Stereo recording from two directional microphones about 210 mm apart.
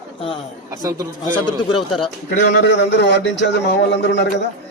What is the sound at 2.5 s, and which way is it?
A man's voice, 55° left (ahead or behind).